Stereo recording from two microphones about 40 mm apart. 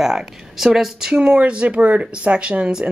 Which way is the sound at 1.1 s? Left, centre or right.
Right.